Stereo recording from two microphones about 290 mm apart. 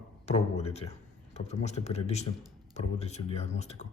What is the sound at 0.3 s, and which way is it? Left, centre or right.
Speech, left.